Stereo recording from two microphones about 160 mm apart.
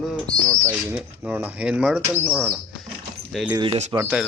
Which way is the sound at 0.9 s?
10° right (ahead or behind).